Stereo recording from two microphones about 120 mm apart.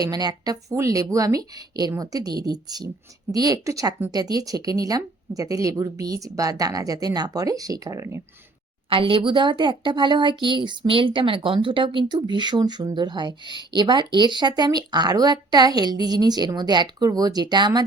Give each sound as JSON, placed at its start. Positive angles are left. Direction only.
{"t": 0.0, "sound": "a woman's voice", "side_deg": -35}
{"t": 8.9, "sound": "a woman's voice", "side_deg": -45}